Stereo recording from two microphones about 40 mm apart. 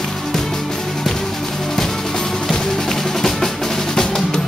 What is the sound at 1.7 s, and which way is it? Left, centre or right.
Drum, centre.